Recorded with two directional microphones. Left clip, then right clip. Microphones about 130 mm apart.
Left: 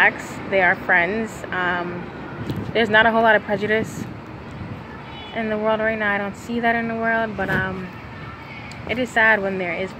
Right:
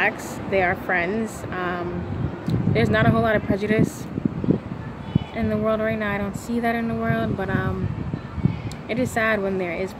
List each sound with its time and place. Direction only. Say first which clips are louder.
0.0 s speech: left 5 dB; 15° right (ahead or behind)
5.3 s a woman's voice: left 3 dB; 20° right (ahead or behind)
8.8 s a woman's voice: left 5 dB; 20° right (ahead or behind)